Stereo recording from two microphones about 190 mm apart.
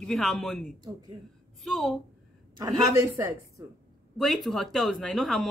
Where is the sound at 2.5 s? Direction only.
15° right (ahead or behind).